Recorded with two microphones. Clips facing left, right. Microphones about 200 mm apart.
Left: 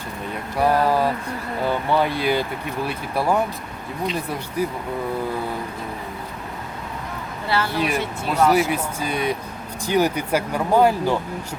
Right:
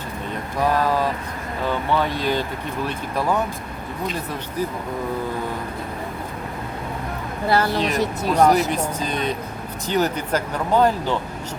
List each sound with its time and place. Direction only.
0.6 s a sound: 10° left (ahead or behind)
1.6 s speech: 10° left (ahead or behind)
7.4 s a woman's voice: 45° right (ahead or behind)
8.7 s speech: 10° left (ahead or behind)